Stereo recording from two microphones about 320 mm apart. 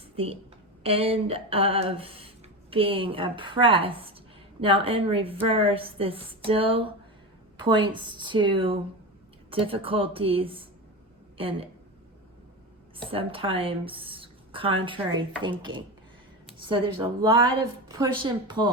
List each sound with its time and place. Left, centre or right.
0.8 s a woman's voice: centre
13.0 s a woman's voice: centre